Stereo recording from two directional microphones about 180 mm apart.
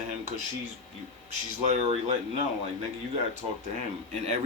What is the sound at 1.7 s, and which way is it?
Speech, 40° right (ahead or behind).